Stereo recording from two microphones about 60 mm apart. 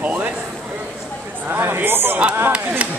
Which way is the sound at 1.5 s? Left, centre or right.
Right.